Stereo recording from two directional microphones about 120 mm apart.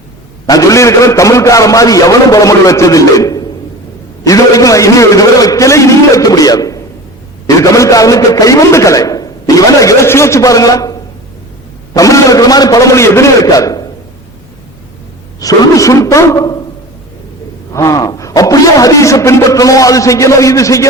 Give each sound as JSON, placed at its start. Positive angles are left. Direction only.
{"t": 0.4, "sound": "a man's voice", "side_deg": 30}
{"t": 11.9, "sound": "a man's voice", "side_deg": 25}
{"t": 15.4, "sound": "a man's voice", "side_deg": 30}
{"t": 17.7, "sound": "a man's voice", "side_deg": 30}